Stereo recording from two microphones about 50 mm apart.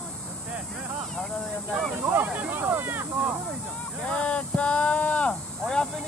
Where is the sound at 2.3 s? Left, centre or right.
Right.